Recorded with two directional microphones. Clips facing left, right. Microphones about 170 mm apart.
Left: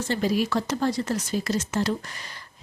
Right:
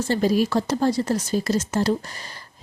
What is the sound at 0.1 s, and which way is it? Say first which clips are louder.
A woman's voice: right 4 dB; 40° right (ahead or behind).